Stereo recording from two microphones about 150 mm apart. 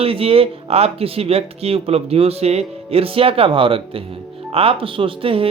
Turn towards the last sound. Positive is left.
turn(degrees=-35)  # may be behind; listen again after turning